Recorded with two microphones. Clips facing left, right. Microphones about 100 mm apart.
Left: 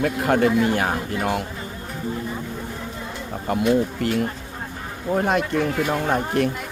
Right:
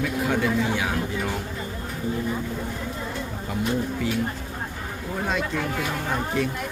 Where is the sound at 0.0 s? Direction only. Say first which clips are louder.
Left 5 dB; 55° left (ahead or behind).